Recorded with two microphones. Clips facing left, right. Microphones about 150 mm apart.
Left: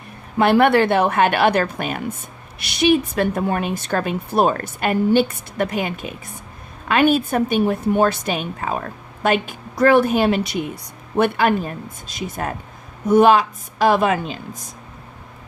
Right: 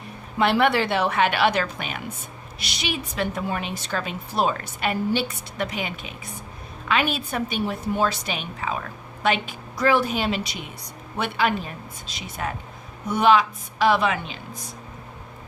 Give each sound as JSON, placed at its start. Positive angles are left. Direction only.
{"t": 0.3, "sound": "a woman's voice", "side_deg": 55}